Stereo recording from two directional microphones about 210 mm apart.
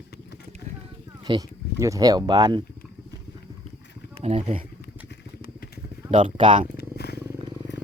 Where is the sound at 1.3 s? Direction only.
25° right (ahead or behind).